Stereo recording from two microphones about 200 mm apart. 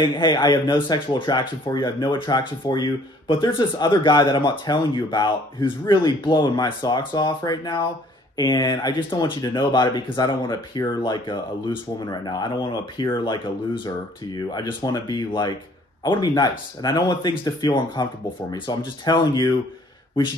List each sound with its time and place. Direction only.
0.0 s speech: 20° left (ahead or behind)